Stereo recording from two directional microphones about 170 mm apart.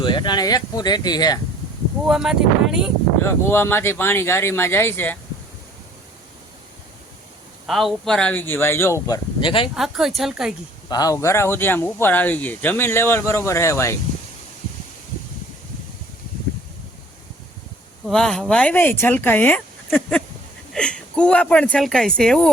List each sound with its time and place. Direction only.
0.0 s speech: 25° left (ahead or behind)
2.0 s speech: 5° right (ahead or behind)
3.2 s speech: 15° left (ahead or behind)
7.7 s speech: centre (ahead or behind); by 9.6 s 30° left (ahead or behind)
9.7 s speech: centre (ahead or behind)
10.8 s speech: 25° left (ahead or behind)
18.0 s speech: 5° left (ahead or behind)
19.9 s a sound: 5° left (ahead or behind)
20.7 s speech: 5° left (ahead or behind)